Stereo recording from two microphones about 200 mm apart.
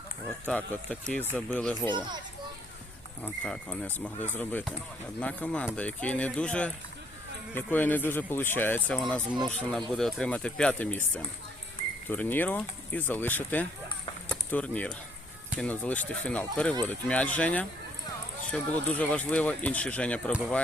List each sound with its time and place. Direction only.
0.4 s speech: 5° left (ahead or behind)
1.9 s a child's voice: 20° right (ahead or behind)
3.2 s speech: 5° left (ahead or behind)